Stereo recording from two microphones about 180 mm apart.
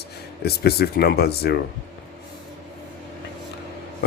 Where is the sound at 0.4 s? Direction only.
60° left (ahead or behind).